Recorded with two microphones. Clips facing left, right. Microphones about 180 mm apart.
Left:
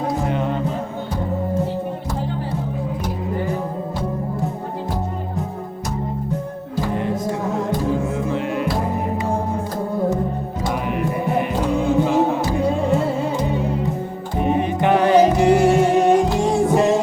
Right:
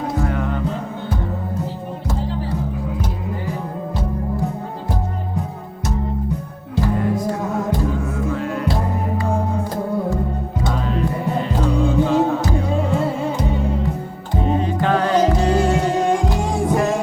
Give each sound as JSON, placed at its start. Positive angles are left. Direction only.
{"t": 0.2, "sound": "music", "side_deg": 20}
{"t": 6.9, "sound": "music", "side_deg": 20}
{"t": 8.3, "sound": "music", "side_deg": 20}
{"t": 10.7, "sound": "music", "side_deg": 15}
{"t": 14.3, "sound": "music", "side_deg": 20}